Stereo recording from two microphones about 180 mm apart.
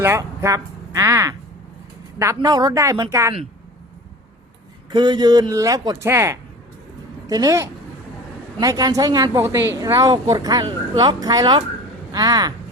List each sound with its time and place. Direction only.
0.0 s a woman's voice: 15° right (ahead or behind)
4.9 s a woman's voice: 25° right (ahead or behind)